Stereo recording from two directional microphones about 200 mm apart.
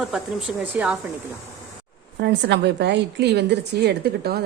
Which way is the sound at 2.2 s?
60° right (ahead or behind).